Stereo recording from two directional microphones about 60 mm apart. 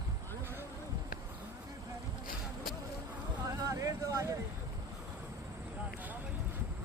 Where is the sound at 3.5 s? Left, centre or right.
Right.